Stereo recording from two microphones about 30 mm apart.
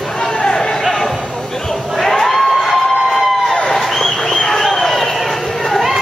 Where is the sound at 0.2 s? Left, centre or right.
Left.